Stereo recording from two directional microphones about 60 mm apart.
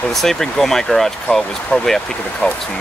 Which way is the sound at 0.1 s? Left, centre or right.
Centre.